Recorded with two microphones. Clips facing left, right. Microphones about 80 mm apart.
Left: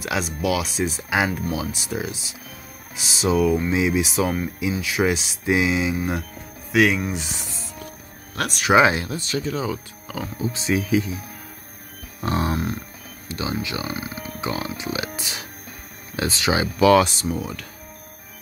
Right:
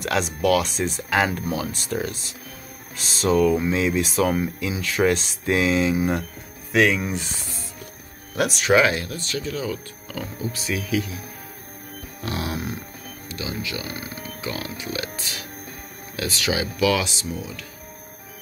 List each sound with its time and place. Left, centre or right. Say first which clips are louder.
0.0 s speech: right 2 dB; centre
8.4 s a sound: right 1 dB; centre
8.7 s speech: left 3 dB; left
9.7 s speech: left 1 dB; centre
10.4 s speech: left 6 dB; left
12.3 s a sound: left 5 dB; centre
13.3 s speech: left 4 dB; left
13.9 s speech: left 3 dB; centre
14.4 s speech: left 4 dB; left
16.8 s speech: left 7 dB; left